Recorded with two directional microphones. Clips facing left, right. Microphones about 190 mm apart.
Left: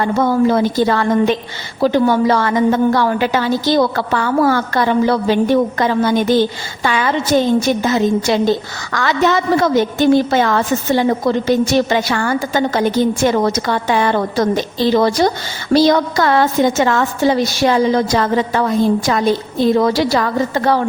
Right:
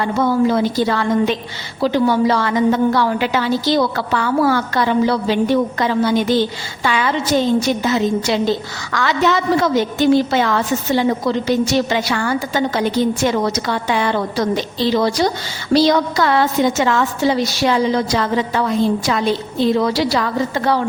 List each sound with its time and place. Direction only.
0.0 s a woman's voice: 50° left (ahead or behind)